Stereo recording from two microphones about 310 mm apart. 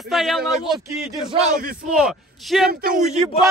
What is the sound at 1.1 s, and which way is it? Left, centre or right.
Speech, right.